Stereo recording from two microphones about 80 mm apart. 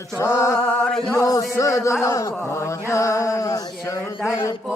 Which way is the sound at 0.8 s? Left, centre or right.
Centre.